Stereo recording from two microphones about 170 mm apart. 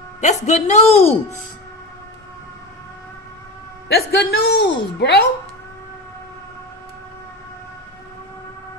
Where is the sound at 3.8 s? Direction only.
70° left (ahead or behind).